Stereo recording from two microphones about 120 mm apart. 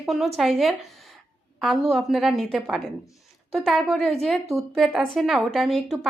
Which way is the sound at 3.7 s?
Centre (ahead or behind).